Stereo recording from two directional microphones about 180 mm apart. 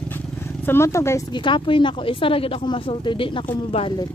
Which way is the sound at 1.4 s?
25° left (ahead or behind).